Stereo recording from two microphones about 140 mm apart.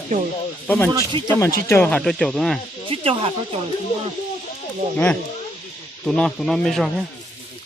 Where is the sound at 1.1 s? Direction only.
40° right (ahead or behind).